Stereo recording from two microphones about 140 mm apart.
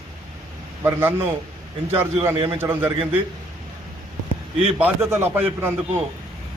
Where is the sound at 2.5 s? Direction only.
15° right (ahead or behind).